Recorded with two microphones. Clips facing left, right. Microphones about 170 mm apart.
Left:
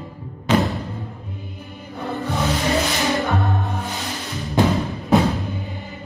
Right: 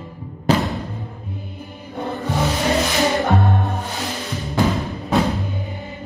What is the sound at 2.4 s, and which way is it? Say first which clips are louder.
Music: right 2 dB; 20° right (ahead or behind).